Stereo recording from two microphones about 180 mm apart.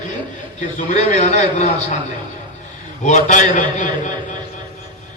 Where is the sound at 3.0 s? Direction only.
45° left (ahead or behind).